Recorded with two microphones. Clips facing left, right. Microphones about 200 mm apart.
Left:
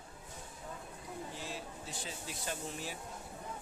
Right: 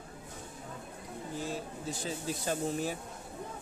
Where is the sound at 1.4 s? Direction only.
45° right (ahead or behind).